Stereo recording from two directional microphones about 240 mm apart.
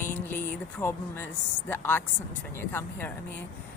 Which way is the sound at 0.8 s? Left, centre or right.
Centre.